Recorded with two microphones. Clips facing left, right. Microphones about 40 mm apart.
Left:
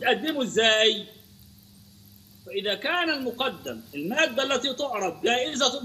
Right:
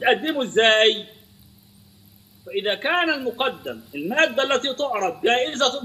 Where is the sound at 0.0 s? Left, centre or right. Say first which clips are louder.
Right 4 dB; centre.